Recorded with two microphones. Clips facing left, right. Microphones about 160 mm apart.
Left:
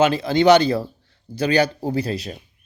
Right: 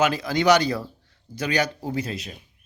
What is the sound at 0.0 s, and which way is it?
Speech, 25° left (ahead or behind).